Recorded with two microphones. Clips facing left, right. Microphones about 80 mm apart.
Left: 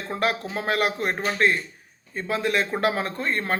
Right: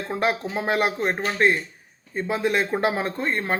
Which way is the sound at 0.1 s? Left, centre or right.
Centre.